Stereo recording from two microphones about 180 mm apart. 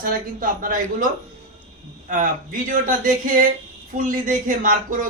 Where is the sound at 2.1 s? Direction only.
45° right (ahead or behind).